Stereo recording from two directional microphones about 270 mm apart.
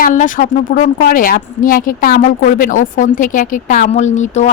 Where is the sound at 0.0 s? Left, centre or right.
Left.